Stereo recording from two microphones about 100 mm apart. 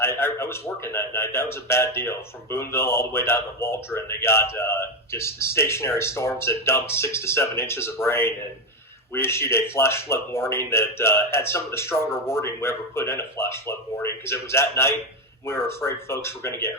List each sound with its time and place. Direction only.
0.0 s a man's voice: 25° left (ahead or behind)